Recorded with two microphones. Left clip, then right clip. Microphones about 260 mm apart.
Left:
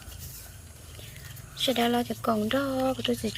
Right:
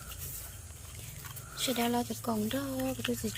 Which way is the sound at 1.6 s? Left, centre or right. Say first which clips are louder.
Left 6 dB; centre.